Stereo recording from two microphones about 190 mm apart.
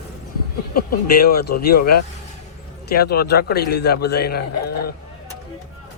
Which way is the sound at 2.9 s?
55° left (ahead or behind).